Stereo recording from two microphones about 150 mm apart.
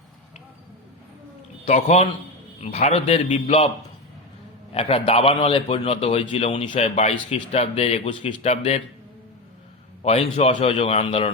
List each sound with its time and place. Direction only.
1.6 s a man's voice: 45° left (ahead or behind)
4.7 s a man's voice: 40° left (ahead or behind)
10.0 s a man's voice: 45° left (ahead or behind)